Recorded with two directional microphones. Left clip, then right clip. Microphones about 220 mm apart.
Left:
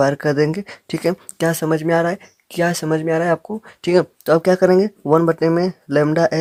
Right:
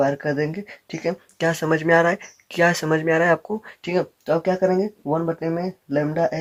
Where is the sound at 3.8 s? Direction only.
40° left (ahead or behind).